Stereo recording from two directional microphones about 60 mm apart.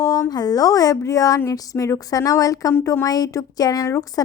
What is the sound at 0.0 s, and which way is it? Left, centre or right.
A woman's voice, left.